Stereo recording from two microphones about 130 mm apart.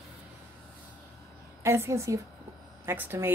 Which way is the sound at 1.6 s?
20° right (ahead or behind).